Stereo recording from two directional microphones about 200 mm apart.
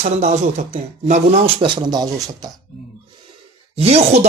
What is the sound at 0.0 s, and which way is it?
Speech, 35° right (ahead or behind).